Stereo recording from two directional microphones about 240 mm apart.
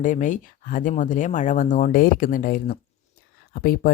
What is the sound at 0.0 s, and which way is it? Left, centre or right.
Speech, left.